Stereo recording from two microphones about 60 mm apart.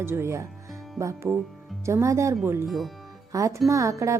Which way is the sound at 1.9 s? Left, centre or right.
Right.